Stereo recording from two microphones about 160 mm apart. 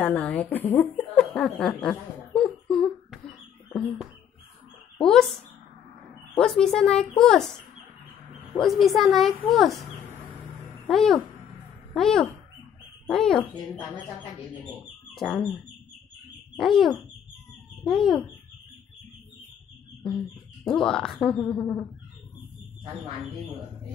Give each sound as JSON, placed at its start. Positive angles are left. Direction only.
{"t": 0.0, "sound": "a sound", "side_deg": 10}
{"t": 5.0, "sound": "speech", "side_deg": 5}
{"t": 6.3, "sound": "speech", "side_deg": 5}
{"t": 8.5, "sound": "speech", "side_deg": 0}
{"t": 10.0, "sound": "music", "side_deg": -15}
{"t": 10.9, "sound": "speech", "side_deg": 0}
{"t": 15.1, "sound": "speech", "side_deg": 0}
{"t": 16.5, "sound": "speech", "side_deg": 0}
{"t": 20.6, "sound": "speech", "side_deg": 5}
{"t": 21.5, "sound": "bird", "side_deg": 5}